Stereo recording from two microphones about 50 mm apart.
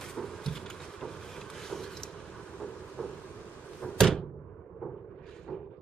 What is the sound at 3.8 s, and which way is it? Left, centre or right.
Door, centre.